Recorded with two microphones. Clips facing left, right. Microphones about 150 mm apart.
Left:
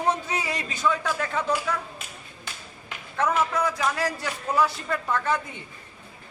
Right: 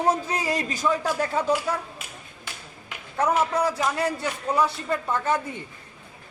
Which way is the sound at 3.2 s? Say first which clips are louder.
Right 2 dB; 30° right (ahead or behind).